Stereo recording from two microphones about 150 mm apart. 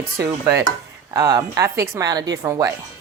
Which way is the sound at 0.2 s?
15° right (ahead or behind).